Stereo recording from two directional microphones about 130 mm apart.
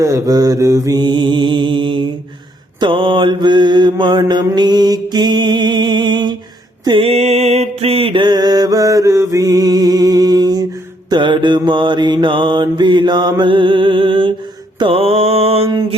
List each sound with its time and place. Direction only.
0.0 s mantra: 25° right (ahead or behind); by 15.7 s 50° right (ahead or behind)